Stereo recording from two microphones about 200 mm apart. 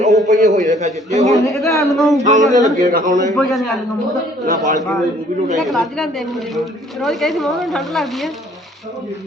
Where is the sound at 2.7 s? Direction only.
40° right (ahead or behind).